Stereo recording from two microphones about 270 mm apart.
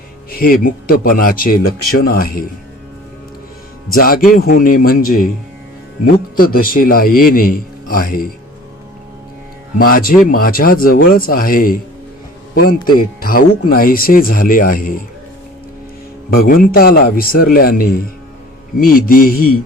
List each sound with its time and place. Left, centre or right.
0.3 s speech: left
3.9 s speech: left
6.3 s speech: left
9.7 s speech: left
13.1 s speech: left
16.3 s speech: left